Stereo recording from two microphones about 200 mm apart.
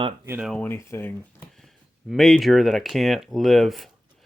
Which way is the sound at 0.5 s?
10° left (ahead or behind).